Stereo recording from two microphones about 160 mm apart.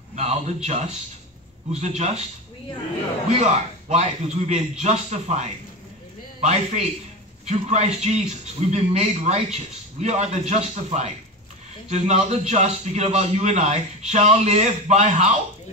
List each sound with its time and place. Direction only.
0.1 s a sound: 45° right (ahead or behind)
1.7 s a man's voice: 45° right (ahead or behind)
3.9 s a man's voice: 45° right (ahead or behind)